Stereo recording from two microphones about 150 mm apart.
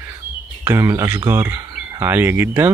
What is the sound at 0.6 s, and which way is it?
Speech, 20° right (ahead or behind).